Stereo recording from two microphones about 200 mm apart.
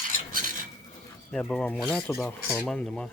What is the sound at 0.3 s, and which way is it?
Cutlery, 45° right (ahead or behind).